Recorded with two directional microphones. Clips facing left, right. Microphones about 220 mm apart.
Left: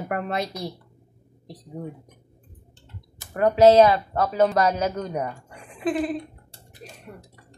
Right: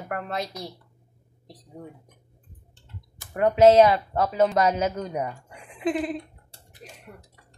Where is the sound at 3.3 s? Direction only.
25° right (ahead or behind).